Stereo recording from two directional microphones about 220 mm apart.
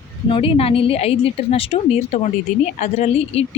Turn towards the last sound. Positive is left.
turn(degrees=30)  # may be behind; listen again after turning